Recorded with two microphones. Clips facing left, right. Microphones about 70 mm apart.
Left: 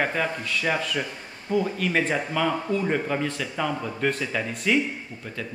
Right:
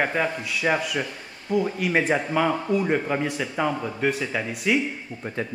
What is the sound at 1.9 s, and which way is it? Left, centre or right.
Speech, centre.